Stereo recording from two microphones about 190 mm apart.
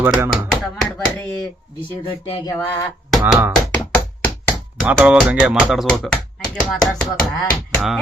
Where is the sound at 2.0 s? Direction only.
25° left (ahead or behind).